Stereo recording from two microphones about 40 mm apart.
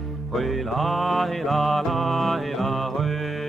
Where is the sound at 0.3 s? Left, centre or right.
Centre.